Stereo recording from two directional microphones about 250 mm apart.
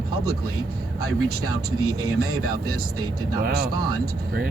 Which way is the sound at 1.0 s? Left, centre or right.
Right.